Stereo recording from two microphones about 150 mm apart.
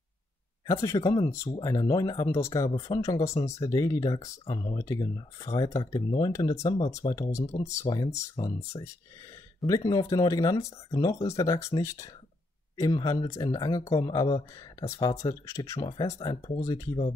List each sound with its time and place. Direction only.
0.7 s speech: 20° left (ahead or behind)
9.7 s speech: 25° left (ahead or behind)